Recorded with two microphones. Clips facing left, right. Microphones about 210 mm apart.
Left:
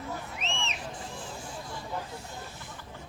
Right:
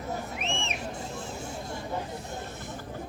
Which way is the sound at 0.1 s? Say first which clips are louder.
Right 6 dB; 40° right (ahead or behind).